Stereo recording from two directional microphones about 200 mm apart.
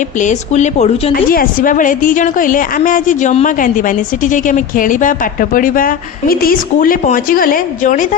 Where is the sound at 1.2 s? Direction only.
45° left (ahead or behind).